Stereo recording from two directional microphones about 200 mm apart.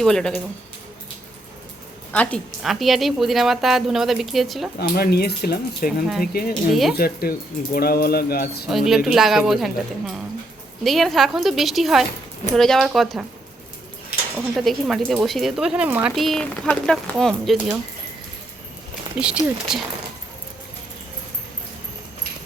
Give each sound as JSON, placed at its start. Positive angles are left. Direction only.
{"t": 0.0, "sound": "a woman's voice", "side_deg": 5}
{"t": 2.1, "sound": "a woman's voice", "side_deg": 5}
{"t": 4.8, "sound": "speech", "side_deg": 50}
{"t": 6.5, "sound": "a woman's voice", "side_deg": 0}
{"t": 6.9, "sound": "speech", "side_deg": 50}
{"t": 8.7, "sound": "a woman's voice", "side_deg": 0}
{"t": 14.5, "sound": "a woman's voice", "side_deg": 0}
{"t": 19.2, "sound": "a woman's voice", "side_deg": -5}